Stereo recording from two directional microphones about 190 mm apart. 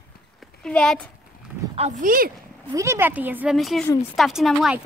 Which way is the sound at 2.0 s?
50° right (ahead or behind).